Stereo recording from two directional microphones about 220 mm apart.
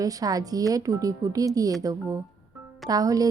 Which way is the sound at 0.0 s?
15° right (ahead or behind).